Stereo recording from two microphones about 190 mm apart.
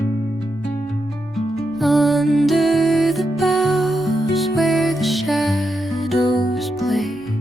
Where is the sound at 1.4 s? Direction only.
Centre (ahead or behind).